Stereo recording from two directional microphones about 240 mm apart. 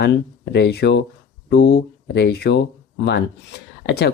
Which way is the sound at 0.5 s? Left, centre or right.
Left.